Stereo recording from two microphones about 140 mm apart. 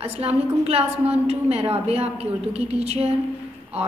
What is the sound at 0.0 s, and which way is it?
A woman's voice, 45° right (ahead or behind).